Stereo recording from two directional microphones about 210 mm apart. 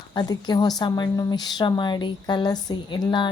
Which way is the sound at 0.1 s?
20° left (ahead or behind).